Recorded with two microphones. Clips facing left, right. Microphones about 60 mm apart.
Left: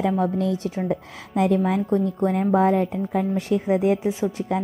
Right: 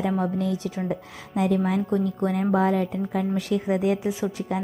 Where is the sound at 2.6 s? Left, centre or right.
Left.